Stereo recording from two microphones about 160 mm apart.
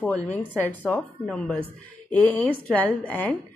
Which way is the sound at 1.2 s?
5° left (ahead or behind).